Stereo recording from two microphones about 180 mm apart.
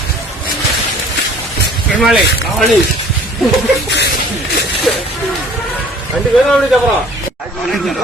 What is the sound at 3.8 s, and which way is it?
Speech, 70° left (ahead or behind).